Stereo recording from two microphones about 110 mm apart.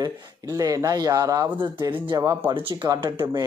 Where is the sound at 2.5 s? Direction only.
50° right (ahead or behind).